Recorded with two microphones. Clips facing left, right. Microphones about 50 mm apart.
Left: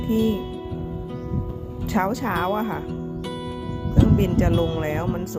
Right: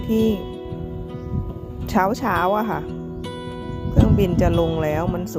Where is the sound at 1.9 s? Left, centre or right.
Right.